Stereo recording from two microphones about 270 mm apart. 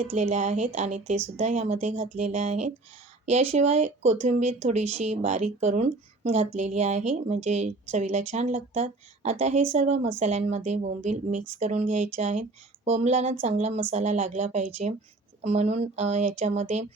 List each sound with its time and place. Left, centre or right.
0.0 s speech: right